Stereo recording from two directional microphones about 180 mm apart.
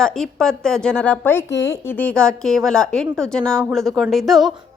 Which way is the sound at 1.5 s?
80° left.